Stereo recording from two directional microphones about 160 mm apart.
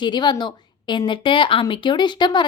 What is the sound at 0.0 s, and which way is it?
A woman's voice, 30° left (ahead or behind).